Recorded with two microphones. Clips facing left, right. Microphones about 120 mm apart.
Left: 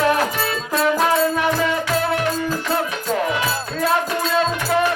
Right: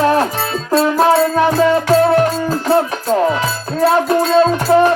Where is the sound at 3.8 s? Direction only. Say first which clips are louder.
Right 8 dB; 35° right (ahead or behind).